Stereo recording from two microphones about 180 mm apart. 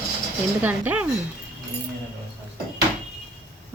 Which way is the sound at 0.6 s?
10° right (ahead or behind).